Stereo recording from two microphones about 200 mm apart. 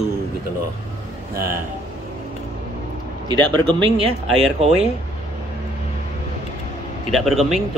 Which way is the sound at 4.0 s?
30° right (ahead or behind).